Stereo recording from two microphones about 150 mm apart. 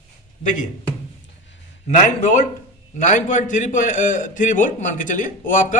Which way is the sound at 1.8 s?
55° left (ahead or behind).